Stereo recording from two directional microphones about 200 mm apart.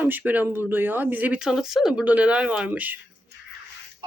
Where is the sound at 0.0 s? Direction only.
10° right (ahead or behind).